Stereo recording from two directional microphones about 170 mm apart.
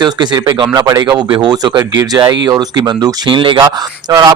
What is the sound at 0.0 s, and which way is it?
Speech, 25° right (ahead or behind).